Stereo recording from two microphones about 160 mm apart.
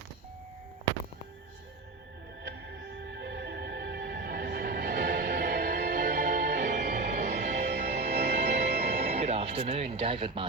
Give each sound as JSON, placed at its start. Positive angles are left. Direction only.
{"t": 3.1, "sound": "music", "side_deg": -90}